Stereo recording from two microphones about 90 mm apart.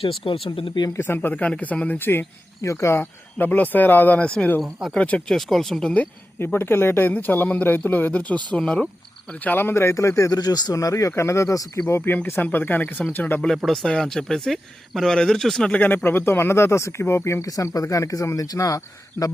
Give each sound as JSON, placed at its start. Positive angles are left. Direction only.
{"t": 0.0, "sound": "speech", "side_deg": 85}
{"t": 0.9, "sound": "speech", "side_deg": 25}
{"t": 5.3, "sound": "speech", "side_deg": 0}
{"t": 5.9, "sound": "speech", "side_deg": 20}
{"t": 9.4, "sound": "speech", "side_deg": 20}
{"t": 13.6, "sound": "speech", "side_deg": 0}
{"t": 16.0, "sound": "speech", "side_deg": 25}